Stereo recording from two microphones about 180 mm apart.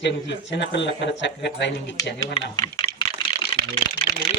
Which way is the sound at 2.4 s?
35° left (ahead or behind).